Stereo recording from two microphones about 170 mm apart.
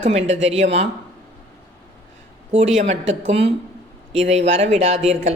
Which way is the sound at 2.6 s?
40° right (ahead or behind).